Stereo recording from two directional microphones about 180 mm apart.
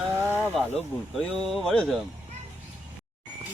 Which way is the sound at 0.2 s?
10° right (ahead or behind).